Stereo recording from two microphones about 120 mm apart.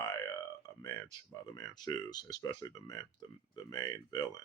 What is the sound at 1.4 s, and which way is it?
Speech, 30° left (ahead or behind).